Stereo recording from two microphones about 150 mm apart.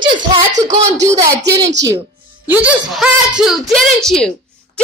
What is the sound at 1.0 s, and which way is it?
A woman's voice, 20° right (ahead or behind).